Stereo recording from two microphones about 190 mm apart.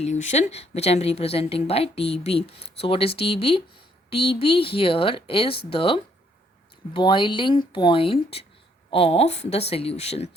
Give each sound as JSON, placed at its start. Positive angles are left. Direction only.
{"t": 0.0, "sound": "a woman's voice", "side_deg": 40}